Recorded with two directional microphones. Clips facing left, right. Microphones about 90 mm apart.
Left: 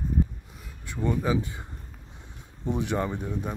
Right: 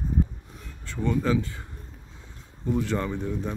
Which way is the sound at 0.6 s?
10° left (ahead or behind).